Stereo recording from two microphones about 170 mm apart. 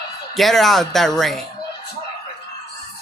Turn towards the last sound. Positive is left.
turn(degrees=0)  # may be behind; listen again after turning